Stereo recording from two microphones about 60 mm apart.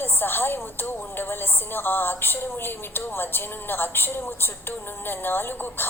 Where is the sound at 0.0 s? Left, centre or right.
Left.